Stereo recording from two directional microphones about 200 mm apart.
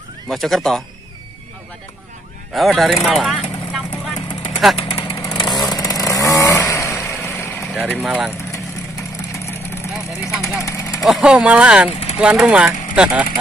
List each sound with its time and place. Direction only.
0.3 s speech: centre (ahead or behind)
2.5 s speech: centre (ahead or behind)
4.7 s vehicle: 30° left (ahead or behind)
5.1 s chainsaw: 15° left (ahead or behind)
7.6 s vehicle: centre (ahead or behind)
8.0 s speech: centre (ahead or behind)
10.3 s speech: centre (ahead or behind)
10.6 s vehicle: 15° left (ahead or behind)
11.1 s speech: 5° right (ahead or behind)